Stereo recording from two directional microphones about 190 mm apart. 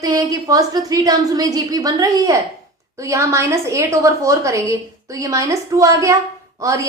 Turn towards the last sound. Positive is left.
turn(degrees=-15)  # may be behind; listen again after turning